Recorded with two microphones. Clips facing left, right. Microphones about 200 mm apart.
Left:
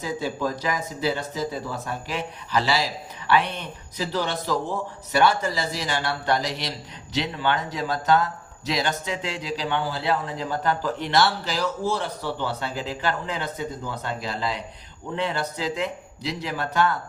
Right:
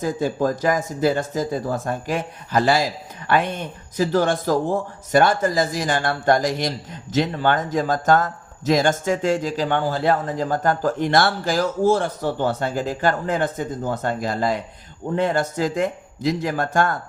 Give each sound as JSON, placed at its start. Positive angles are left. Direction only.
{"t": 0.0, "sound": "speech", "side_deg": -45}